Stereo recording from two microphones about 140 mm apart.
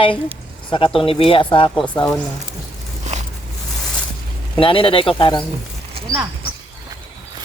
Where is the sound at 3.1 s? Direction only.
55° right (ahead or behind).